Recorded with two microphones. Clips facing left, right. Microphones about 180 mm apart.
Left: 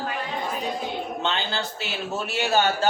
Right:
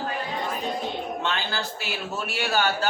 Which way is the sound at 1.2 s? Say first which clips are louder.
Left 1 dB; 25° left (ahead or behind).